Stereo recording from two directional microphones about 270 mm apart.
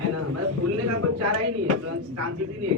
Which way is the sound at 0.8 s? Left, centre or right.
Right.